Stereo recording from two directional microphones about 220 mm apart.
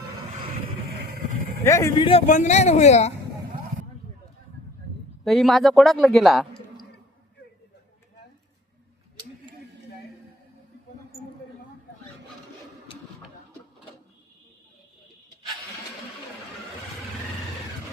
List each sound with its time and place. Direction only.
1.6 s speech: 15° left (ahead or behind)
2.0 s speech: 30° left (ahead or behind)
5.2 s a man's voice: centre (ahead or behind)